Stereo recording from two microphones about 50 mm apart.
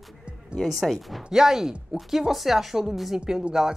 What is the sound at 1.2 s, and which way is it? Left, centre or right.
A woman's voice, centre.